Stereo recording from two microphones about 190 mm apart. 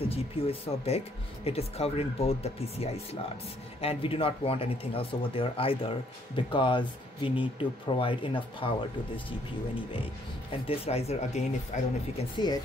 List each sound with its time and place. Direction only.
0.0 s speech: 30° left (ahead or behind)
10.7 s speech: 30° left (ahead or behind)
12.4 s speech: 25° left (ahead or behind)